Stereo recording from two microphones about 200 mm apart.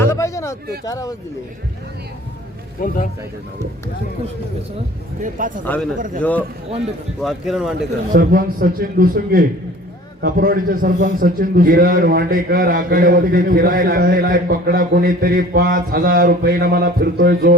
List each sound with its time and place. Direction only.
0.0 s a sound: 15° left (ahead or behind)
0.9 s a man's voice: 15° left (ahead or behind)
2.8 s speech: 45° left (ahead or behind)
5.2 s speech: 40° right (ahead or behind)
5.6 s a man's voice: 10° left (ahead or behind)
7.2 s speech: centre (ahead or behind)
8.1 s a man's voice: 45° right (ahead or behind)